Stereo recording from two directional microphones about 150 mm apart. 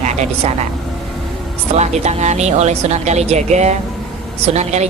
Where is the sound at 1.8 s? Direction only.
45° right (ahead or behind).